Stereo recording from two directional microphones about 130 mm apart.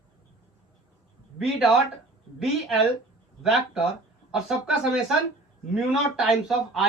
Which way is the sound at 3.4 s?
5° right (ahead or behind).